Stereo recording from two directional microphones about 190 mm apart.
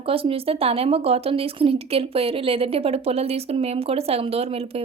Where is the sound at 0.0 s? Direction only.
30° right (ahead or behind).